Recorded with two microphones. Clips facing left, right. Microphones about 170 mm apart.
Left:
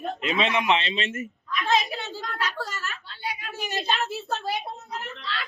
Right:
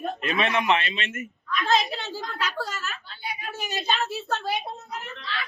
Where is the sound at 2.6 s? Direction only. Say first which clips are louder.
Right 1 dB; centre (ahead or behind).